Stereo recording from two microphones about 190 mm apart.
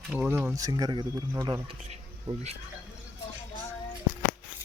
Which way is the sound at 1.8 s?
35° right (ahead or behind).